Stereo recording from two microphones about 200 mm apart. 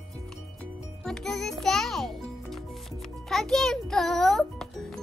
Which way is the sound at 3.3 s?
Centre (ahead or behind).